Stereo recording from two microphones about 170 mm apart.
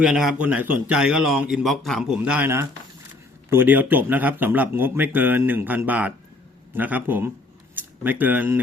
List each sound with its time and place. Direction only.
0.0 s a man's voice: 5° right (ahead or behind)